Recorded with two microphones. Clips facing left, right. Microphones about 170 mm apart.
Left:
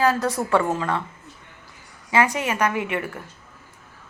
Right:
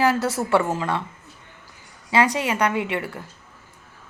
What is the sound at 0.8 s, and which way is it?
Speech, 20° right (ahead or behind).